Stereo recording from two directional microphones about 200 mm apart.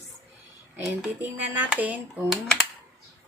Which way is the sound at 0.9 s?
10° right (ahead or behind).